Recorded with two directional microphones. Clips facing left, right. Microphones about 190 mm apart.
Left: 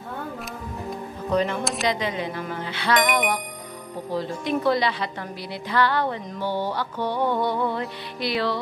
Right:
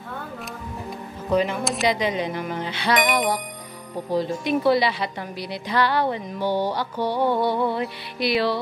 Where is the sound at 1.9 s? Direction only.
15° right (ahead or behind).